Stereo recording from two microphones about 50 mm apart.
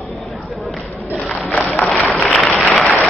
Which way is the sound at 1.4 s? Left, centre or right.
Left.